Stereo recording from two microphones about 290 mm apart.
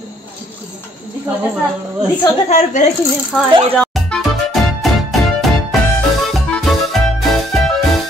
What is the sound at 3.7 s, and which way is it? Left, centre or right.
Music, centre.